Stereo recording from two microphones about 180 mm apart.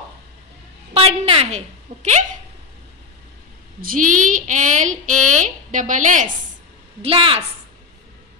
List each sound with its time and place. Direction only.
0.9 s a woman's voice: 30° right (ahead or behind)
3.8 s a woman's voice: 50° right (ahead or behind)
7.0 s a woman's voice: 30° right (ahead or behind)